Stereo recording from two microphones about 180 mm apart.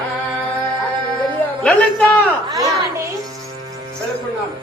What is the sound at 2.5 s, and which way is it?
Speech, 20° right (ahead or behind).